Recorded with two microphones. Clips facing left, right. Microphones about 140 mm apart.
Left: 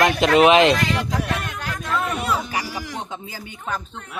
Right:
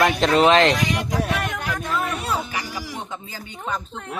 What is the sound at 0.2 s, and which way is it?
Speech, 10° left (ahead or behind).